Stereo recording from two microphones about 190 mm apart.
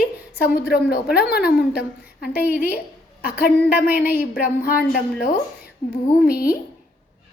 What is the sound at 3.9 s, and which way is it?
Speech, 50° left (ahead or behind).